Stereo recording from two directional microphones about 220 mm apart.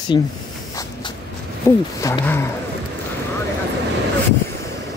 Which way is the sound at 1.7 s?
10° left (ahead or behind).